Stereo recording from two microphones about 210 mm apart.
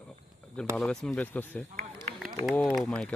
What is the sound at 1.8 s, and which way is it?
Run, 30° right (ahead or behind).